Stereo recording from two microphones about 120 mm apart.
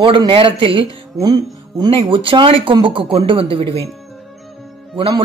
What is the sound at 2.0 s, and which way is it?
Speech, 45° right (ahead or behind).